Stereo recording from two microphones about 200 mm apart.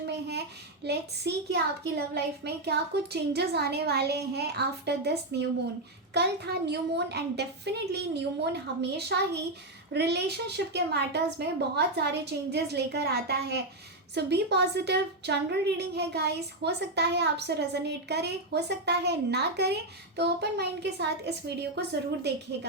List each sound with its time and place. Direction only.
0.9 s a woman's voice: 55° right (ahead or behind)